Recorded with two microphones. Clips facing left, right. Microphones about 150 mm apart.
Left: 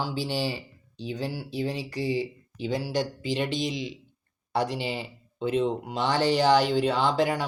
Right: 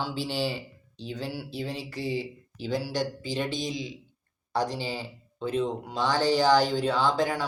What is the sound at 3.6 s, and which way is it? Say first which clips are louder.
Speech: left 2 dB; centre (ahead or behind).